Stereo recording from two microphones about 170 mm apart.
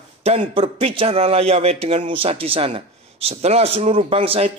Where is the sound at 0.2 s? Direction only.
40° right (ahead or behind).